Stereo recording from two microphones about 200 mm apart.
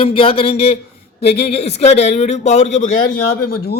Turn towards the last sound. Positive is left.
turn(degrees=50)  # may be behind; listen again after turning